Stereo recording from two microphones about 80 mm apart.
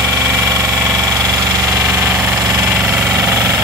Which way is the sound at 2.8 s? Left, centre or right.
Centre.